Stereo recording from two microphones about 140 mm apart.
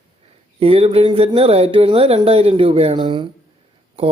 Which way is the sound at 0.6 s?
45° right (ahead or behind).